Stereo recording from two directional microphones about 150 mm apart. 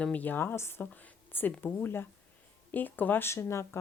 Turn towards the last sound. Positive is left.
turn(degrees=20)  # may be behind; listen again after turning